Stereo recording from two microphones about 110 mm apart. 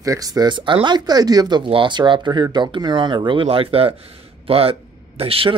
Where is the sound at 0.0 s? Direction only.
30° right (ahead or behind).